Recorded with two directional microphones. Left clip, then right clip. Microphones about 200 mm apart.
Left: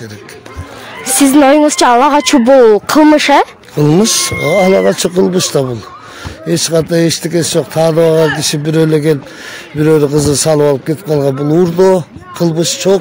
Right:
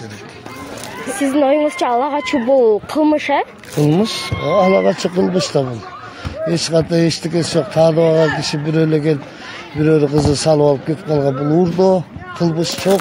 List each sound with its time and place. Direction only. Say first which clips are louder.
1.3 s speech: left 6 dB; 55° left (ahead or behind)